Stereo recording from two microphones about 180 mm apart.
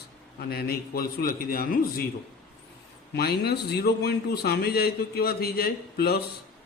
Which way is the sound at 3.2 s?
65° left (ahead or behind).